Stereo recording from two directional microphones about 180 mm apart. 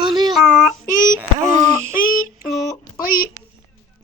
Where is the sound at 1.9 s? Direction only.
50° left (ahead or behind).